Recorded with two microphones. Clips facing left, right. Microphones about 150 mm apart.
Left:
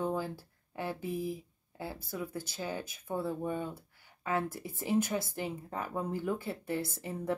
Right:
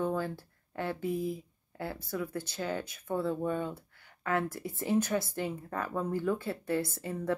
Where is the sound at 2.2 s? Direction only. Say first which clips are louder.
Right 3 dB; 10° left (ahead or behind).